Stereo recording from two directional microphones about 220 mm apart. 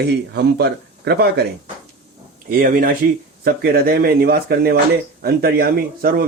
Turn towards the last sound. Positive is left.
turn(degrees=-45)  # may be behind; listen again after turning